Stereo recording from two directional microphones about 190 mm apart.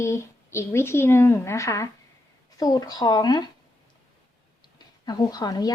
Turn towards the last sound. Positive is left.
turn(degrees=20)  # may be behind; listen again after turning